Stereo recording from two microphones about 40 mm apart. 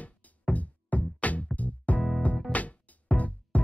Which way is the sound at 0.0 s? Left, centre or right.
Left.